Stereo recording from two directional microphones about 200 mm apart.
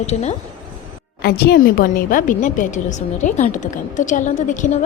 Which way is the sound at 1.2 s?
50° left (ahead or behind).